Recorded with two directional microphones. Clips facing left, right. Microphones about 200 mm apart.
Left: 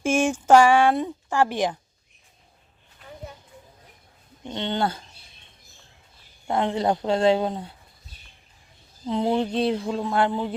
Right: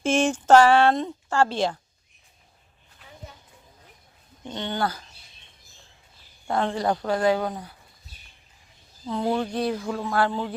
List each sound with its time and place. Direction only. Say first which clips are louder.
0.0 s a woman's voice: even; 10° left (ahead or behind)
4.4 s speech: left 2 dB; 20° left (ahead or behind)
6.5 s speech: left 1 dB; 20° left (ahead or behind)
9.0 s speech: left 2 dB; 20° left (ahead or behind)